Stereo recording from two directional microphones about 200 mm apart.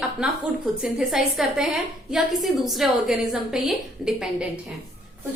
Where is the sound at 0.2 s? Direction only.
5° right (ahead or behind).